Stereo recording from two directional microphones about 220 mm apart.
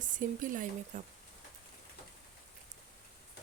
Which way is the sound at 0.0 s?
35° right (ahead or behind).